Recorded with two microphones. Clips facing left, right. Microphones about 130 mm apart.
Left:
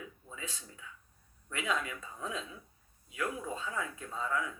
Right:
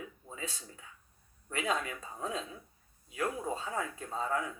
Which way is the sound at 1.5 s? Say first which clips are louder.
Right 2 dB; 35° right (ahead or behind).